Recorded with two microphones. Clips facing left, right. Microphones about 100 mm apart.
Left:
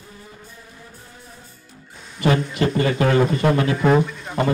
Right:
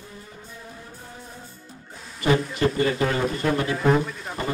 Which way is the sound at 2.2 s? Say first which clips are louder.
Left 2 dB; 90° left.